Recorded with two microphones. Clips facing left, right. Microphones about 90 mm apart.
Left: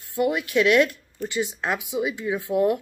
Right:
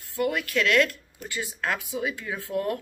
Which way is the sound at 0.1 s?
20° left (ahead or behind).